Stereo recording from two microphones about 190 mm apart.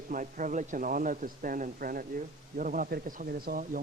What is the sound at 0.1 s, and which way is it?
Speech, 45° right (ahead or behind).